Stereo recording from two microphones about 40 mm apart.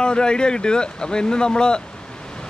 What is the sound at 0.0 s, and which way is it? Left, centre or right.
Speech, left.